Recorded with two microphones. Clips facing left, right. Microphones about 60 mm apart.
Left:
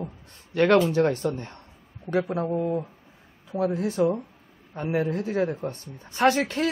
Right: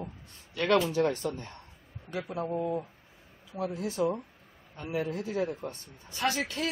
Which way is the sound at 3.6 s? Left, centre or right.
Left.